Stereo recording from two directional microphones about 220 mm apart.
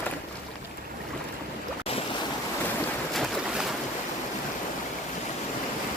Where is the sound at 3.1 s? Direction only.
Centre (ahead or behind).